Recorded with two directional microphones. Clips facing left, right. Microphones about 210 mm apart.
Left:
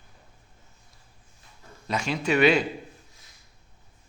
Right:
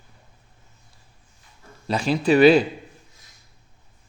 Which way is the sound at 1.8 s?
35° right (ahead or behind).